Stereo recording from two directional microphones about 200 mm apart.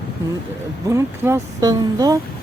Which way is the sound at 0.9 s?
15° right (ahead or behind).